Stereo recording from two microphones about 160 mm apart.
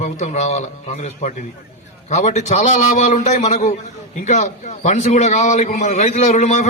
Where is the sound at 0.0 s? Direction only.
45° left (ahead or behind).